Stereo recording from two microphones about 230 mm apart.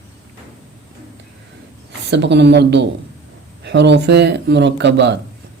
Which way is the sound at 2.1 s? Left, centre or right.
Right.